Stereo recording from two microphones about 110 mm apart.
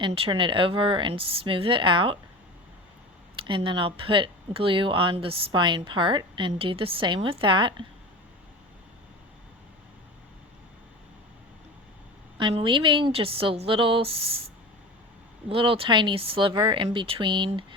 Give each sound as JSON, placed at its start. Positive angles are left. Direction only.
{"t": 0.0, "sound": "a woman's voice", "side_deg": -50}
{"t": 3.4, "sound": "a woman's voice", "side_deg": -50}
{"t": 5.5, "sound": "a woman's voice", "side_deg": -45}
{"t": 12.4, "sound": "speech", "side_deg": -50}
{"t": 15.4, "sound": "a woman's voice", "side_deg": -55}